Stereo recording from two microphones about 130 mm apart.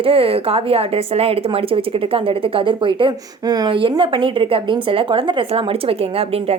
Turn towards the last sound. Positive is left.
turn(degrees=-50)  # may be behind; listen again after turning